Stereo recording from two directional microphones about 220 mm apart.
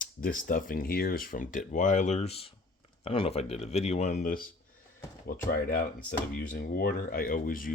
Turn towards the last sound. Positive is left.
turn(degrees=40)  # may be behind; listen again after turning